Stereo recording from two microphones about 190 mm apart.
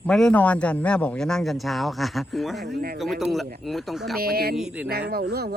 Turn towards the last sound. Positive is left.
turn(degrees=-55)  # may be behind; listen again after turning